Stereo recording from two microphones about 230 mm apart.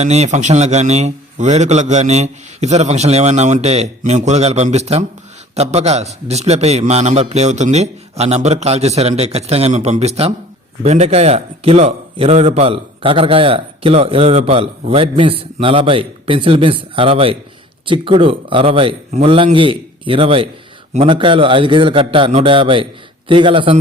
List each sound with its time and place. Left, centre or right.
0.0 s a man's voice: right